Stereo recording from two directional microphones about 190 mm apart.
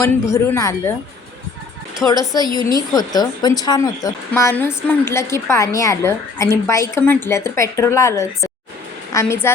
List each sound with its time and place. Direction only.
0.0 s a woman's voice: 15° left (ahead or behind)
2.0 s a woman's voice: 20° left (ahead or behind)